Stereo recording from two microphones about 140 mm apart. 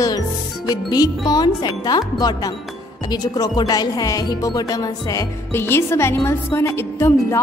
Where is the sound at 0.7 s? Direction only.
25° left (ahead or behind).